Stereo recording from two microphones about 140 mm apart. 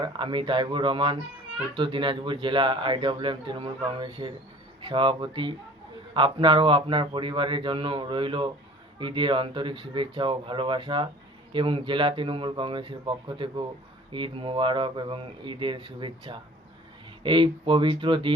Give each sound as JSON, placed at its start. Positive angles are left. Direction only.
{"t": 0.0, "sound": "speech", "side_deg": -35}